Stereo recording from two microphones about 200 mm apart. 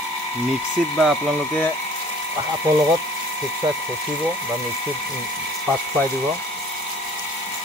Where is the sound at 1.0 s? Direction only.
Centre (ahead or behind).